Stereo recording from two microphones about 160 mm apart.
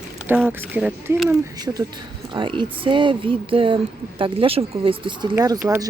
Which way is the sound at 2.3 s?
30° right (ahead or behind).